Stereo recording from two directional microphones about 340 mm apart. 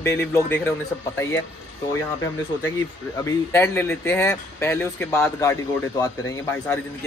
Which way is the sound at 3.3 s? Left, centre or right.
Centre.